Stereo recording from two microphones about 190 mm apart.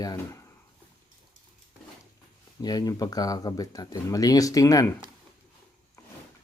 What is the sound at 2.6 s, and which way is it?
Speech, 20° left (ahead or behind).